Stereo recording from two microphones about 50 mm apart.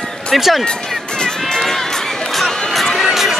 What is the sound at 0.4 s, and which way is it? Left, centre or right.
Speech, centre.